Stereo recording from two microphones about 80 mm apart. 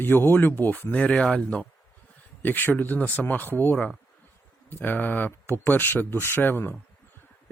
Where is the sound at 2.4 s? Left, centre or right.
Left.